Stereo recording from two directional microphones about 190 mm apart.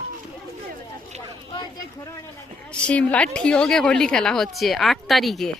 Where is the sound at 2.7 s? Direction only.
5° left (ahead or behind).